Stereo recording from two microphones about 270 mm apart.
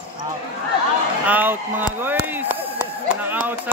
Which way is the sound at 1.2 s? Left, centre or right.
Centre.